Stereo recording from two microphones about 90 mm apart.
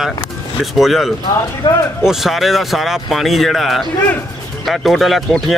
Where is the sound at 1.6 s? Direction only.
50° left (ahead or behind).